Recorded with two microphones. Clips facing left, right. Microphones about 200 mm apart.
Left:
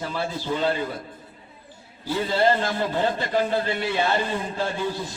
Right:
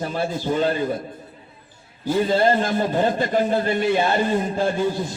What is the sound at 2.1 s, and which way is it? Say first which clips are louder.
A man's voice: right 3 dB; 45° right (ahead or behind).